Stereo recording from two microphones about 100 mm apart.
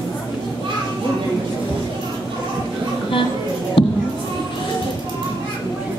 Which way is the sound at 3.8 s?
60° left (ahead or behind).